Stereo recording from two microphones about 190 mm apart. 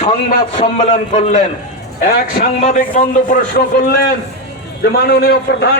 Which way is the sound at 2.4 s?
40° left (ahead or behind).